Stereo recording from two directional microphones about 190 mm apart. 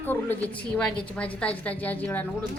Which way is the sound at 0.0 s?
10° left (ahead or behind).